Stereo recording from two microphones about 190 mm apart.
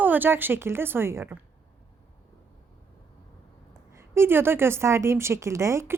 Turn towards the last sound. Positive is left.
turn(degrees=-15)  # may be behind; listen again after turning